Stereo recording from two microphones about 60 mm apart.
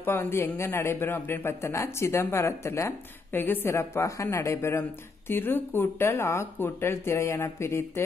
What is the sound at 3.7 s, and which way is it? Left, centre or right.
Speech, left.